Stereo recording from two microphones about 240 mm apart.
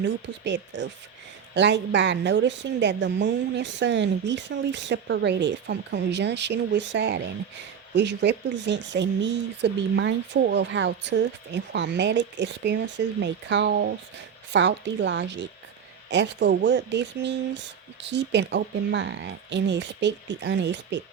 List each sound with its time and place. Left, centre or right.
0.0 s speech: right